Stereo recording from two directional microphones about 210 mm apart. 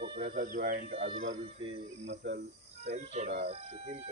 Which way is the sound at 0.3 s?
40° right (ahead or behind).